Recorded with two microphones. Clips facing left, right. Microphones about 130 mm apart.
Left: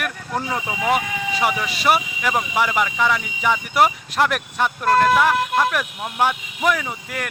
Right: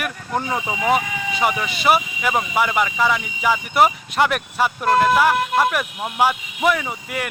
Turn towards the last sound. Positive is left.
turn(degrees=-5)  # may be behind; listen again after turning